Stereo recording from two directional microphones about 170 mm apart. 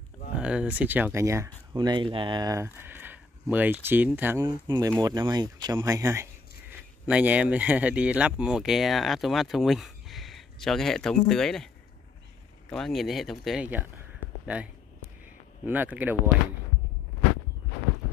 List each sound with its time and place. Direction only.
0.4 s speech: 5° right (ahead or behind)
4.6 s speech: 20° right (ahead or behind)
7.1 s speech: 5° right (ahead or behind)